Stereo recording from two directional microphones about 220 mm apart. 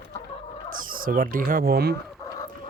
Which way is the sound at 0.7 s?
40° right (ahead or behind).